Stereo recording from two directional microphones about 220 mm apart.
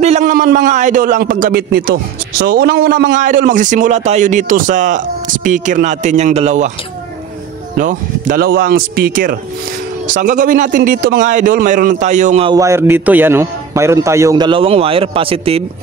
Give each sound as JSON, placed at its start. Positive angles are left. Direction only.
{"t": 0.0, "sound": "a sound", "side_deg": -35}
{"t": 2.3, "sound": "a man's voice", "side_deg": -45}
{"t": 3.2, "sound": "speech", "side_deg": -35}
{"t": 7.7, "sound": "speech", "side_deg": -35}
{"t": 12.4, "sound": "a man's voice", "side_deg": -15}